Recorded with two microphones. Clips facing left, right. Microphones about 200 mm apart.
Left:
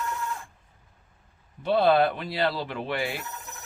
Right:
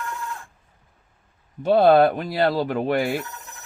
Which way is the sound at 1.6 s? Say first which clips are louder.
Right 6 dB; 45° right (ahead or behind).